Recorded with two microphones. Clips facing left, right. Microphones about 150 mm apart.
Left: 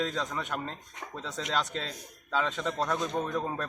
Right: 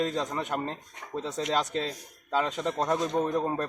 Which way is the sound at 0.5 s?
35° right (ahead or behind).